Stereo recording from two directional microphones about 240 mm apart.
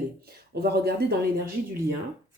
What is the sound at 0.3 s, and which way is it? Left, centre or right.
Speech, right.